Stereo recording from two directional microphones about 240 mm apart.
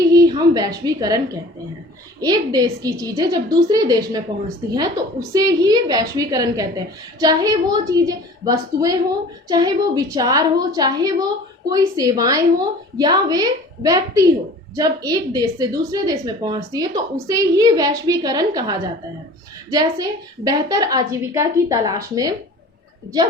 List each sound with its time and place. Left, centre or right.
0.1 s a woman's voice: centre
2.2 s a woman's voice: centre
5.3 s a woman's voice: centre